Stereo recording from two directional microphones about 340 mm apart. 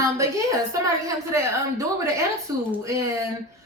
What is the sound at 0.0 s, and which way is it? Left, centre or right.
A woman's voice, centre.